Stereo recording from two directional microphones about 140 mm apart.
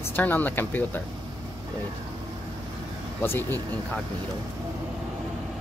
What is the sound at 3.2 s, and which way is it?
Speech, 15° left (ahead or behind).